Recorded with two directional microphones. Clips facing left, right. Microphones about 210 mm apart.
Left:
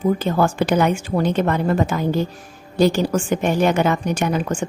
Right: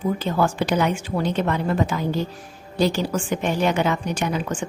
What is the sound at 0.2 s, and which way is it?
A woman's voice, 50° left (ahead or behind).